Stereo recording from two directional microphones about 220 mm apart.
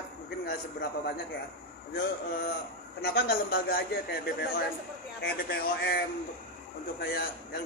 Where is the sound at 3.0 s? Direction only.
45° left (ahead or behind).